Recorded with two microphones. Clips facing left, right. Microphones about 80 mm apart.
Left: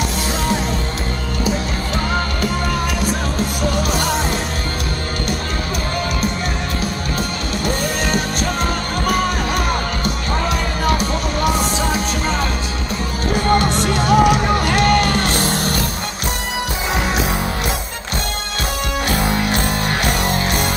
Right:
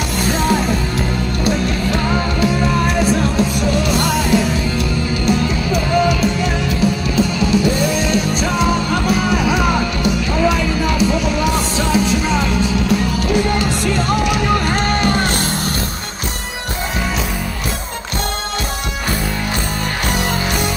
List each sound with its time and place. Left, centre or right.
1.4 s music: right
2.4 s music: right
4.0 s music: right
5.2 s music: left
8.0 s music: left
9.3 s music: right
13.7 s music: left
15.3 s music: left
19.1 s music: left